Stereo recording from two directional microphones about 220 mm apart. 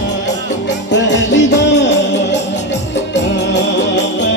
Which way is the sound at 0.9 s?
55° left (ahead or behind).